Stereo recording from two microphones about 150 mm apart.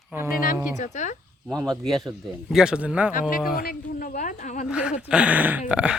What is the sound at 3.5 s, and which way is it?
A woman's voice, 70° left (ahead or behind).